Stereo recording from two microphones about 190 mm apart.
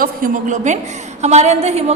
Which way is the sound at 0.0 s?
40° right (ahead or behind).